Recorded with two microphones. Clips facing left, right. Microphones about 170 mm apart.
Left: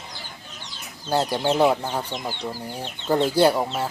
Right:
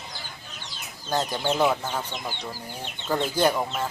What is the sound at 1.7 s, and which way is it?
Speech, 15° left (ahead or behind).